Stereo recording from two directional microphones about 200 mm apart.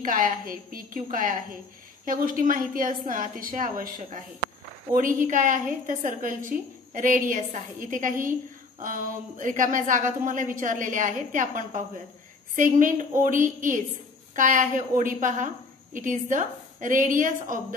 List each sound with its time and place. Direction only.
0.0 s a woman's voice: 45° right (ahead or behind)